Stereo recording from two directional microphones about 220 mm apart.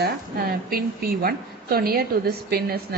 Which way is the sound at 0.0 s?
45° right (ahead or behind).